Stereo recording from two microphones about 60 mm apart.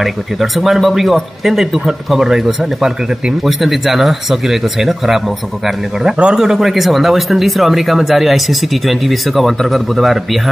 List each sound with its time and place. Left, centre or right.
0.0 s speech: centre